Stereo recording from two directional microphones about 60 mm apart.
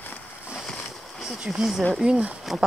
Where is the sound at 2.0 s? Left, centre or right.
Centre.